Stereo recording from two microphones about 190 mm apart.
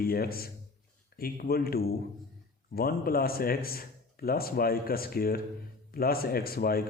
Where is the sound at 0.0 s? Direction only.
50° left (ahead or behind).